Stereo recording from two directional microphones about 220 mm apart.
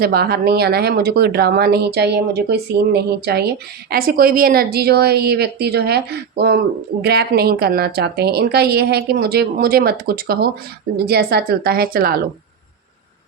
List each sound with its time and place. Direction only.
0.0 s speech: 45° right (ahead or behind)